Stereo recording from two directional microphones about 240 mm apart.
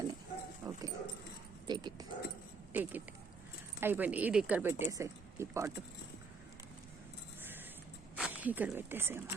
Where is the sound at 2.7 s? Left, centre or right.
Centre.